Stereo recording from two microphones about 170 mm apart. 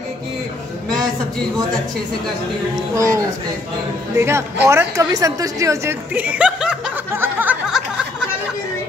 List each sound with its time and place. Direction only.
2.7 s speech: 20° right (ahead or behind)